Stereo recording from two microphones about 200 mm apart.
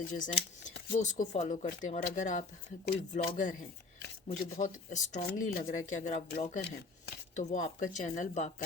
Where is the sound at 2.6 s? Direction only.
55° left (ahead or behind).